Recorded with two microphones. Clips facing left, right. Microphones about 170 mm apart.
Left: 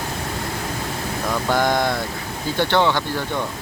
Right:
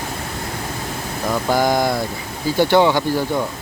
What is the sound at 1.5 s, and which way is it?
Speech, 5° right (ahead or behind).